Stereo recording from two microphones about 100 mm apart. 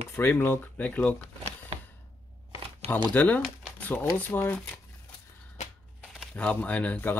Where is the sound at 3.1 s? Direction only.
15° left (ahead or behind).